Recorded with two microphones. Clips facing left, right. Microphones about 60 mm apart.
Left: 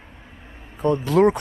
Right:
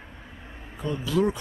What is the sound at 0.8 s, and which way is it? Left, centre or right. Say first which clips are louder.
Speech: left 8 dB; left.